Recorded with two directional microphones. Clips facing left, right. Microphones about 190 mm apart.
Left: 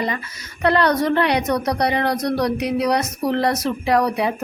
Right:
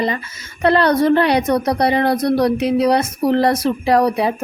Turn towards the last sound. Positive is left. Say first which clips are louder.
# right 3 dB
turn(degrees=-30)  # may be behind; listen again after turning